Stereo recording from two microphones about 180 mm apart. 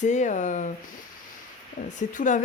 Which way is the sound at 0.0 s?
40° left (ahead or behind).